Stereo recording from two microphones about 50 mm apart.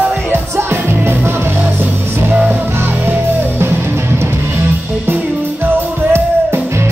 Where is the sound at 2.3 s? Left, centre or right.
Right.